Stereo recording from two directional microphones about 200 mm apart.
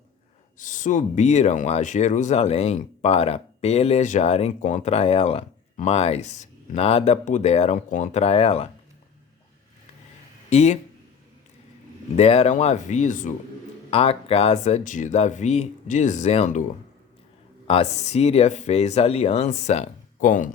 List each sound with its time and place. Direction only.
0.6 s speech: 40° left (ahead or behind)
10.5 s speech: 35° left (ahead or behind)
12.1 s speech: 30° left (ahead or behind)
17.7 s speech: 30° left (ahead or behind)